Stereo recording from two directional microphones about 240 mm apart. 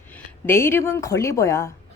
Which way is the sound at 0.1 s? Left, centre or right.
Centre.